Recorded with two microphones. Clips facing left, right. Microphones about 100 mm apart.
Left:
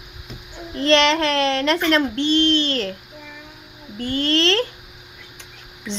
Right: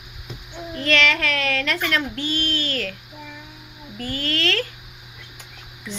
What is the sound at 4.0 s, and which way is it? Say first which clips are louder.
Speech: left 6 dB; 30° left (ahead or behind).